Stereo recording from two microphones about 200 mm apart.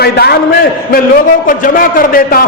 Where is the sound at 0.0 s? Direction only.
55° left (ahead or behind).